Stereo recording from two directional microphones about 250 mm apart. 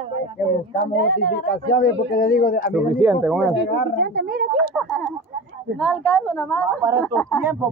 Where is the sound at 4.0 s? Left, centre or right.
Right.